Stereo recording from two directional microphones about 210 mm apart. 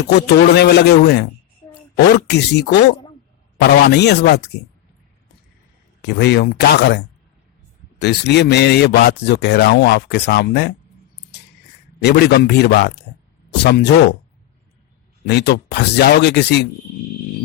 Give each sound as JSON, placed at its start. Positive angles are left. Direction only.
{"t": 0.0, "sound": "speech", "side_deg": 55}
{"t": 6.0, "sound": "speech", "side_deg": 50}
{"t": 12.0, "sound": "speech", "side_deg": 50}
{"t": 15.3, "sound": "speech", "side_deg": 50}